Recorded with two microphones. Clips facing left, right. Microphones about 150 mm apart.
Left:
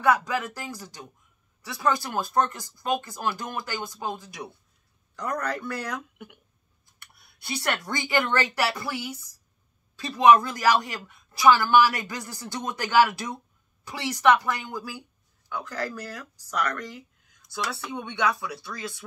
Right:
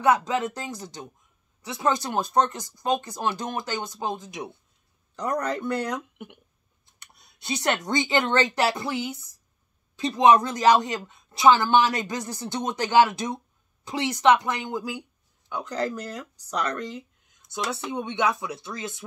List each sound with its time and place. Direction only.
0.0 s speech: 20° right (ahead or behind)